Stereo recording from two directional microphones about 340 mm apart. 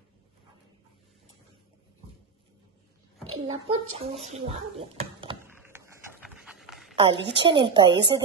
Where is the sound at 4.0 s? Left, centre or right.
Centre.